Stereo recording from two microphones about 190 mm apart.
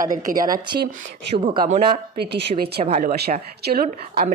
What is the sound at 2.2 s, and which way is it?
A woman's voice, 55° right (ahead or behind).